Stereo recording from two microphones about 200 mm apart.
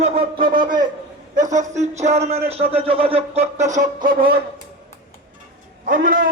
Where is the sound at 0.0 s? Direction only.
25° right (ahead or behind).